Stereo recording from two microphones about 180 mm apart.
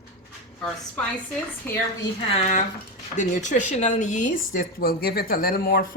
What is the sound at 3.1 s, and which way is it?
Speech, 45° left (ahead or behind).